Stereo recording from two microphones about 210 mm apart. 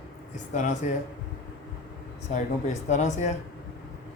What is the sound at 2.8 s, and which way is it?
Speech, 35° left (ahead or behind).